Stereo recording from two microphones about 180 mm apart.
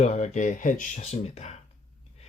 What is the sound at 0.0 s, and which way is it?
Speech, 40° left (ahead or behind).